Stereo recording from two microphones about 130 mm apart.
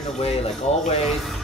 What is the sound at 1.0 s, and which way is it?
Speech, centre (ahead or behind).